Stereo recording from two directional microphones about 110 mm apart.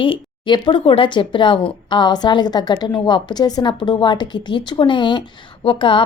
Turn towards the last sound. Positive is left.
turn(degrees=50)  # may be behind; listen again after turning